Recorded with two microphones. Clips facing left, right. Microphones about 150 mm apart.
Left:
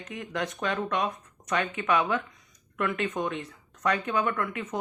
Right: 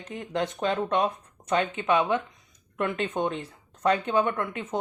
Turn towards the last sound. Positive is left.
turn(degrees=-25)  # may be behind; listen again after turning